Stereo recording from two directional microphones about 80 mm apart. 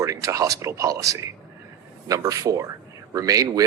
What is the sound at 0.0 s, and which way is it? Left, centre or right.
Speech, right.